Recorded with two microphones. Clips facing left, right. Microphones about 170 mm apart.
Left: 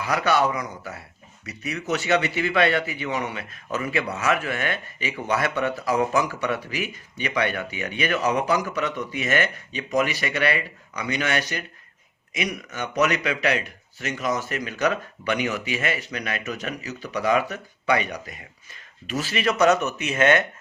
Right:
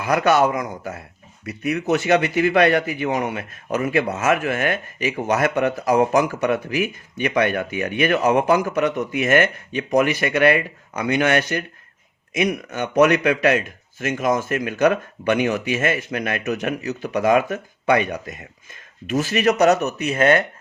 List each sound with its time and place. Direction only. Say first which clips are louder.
0.0 s speech: right 5 dB; 50° right (ahead or behind)